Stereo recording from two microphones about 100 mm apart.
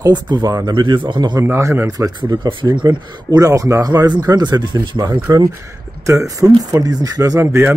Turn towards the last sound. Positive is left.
turn(degrees=-25)  # may be behind; listen again after turning